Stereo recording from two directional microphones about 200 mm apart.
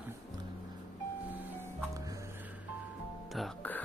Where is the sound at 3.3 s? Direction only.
5° left (ahead or behind).